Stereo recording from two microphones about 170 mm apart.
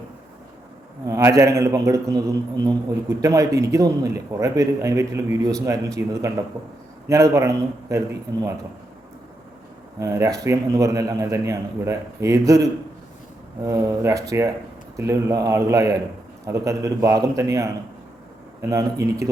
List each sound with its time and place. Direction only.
1.0 s a man's voice: 20° right (ahead or behind)
7.1 s a man's voice: 20° right (ahead or behind)
10.0 s a man's voice: 20° right (ahead or behind)